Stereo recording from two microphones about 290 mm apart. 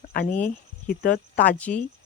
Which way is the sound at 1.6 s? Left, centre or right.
Centre.